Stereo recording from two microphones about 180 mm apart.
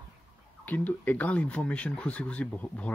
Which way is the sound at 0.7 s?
10° left (ahead or behind).